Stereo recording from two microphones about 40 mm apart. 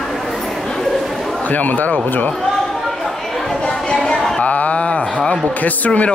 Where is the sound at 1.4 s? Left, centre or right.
Left.